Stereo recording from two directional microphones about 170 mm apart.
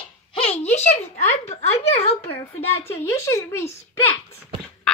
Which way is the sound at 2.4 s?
15° left (ahead or behind).